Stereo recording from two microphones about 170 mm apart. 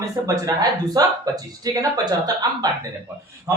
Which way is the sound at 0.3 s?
20° right (ahead or behind).